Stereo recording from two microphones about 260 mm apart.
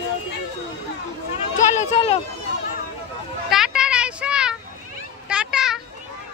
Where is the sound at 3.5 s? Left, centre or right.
Centre.